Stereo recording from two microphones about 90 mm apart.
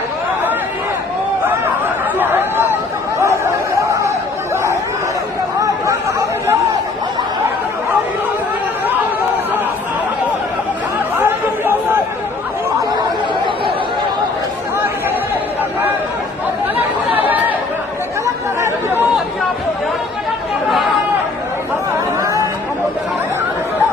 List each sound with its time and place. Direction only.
2.1 s a sound: 25° right (ahead or behind)
5.5 s chatter: 40° right (ahead or behind)
11.2 s chatter: 25° right (ahead or behind)
16.7 s chatter: 20° right (ahead or behind)
18.6 s chatter: 25° right (ahead or behind)
20.7 s chatter: centre (ahead or behind)